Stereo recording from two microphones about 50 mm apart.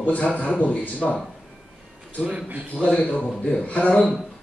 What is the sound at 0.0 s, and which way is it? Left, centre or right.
Speech, left.